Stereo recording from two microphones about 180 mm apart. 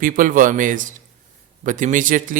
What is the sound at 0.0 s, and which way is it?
A man's voice, 50° right (ahead or behind).